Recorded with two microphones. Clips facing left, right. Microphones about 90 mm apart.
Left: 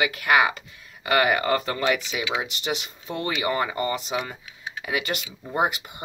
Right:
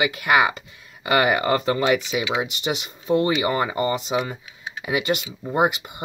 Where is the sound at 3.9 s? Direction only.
5° right (ahead or behind).